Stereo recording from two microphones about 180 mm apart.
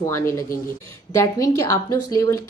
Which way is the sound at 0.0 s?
15° left (ahead or behind).